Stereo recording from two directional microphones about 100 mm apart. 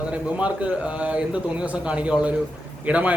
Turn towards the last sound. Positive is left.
turn(degrees=-15)  # may be behind; listen again after turning